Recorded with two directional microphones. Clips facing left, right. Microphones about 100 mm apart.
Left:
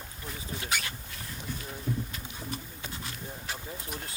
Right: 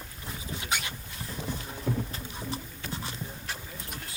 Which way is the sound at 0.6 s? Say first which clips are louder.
Right 1 dB; 20° right (ahead or behind).